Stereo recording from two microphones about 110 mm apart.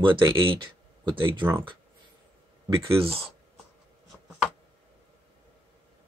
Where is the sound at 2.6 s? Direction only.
30° right (ahead or behind).